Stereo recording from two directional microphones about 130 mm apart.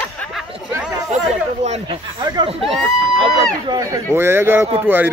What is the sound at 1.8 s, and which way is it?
Speech, 40° right (ahead or behind).